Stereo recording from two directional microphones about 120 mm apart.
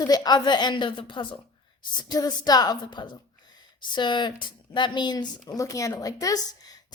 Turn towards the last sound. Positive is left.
turn(degrees=30)  # may be behind; listen again after turning